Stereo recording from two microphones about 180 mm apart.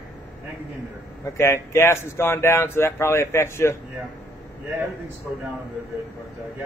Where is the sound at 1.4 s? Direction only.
15° left (ahead or behind).